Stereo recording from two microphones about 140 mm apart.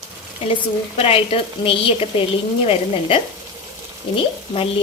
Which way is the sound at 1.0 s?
45° left (ahead or behind).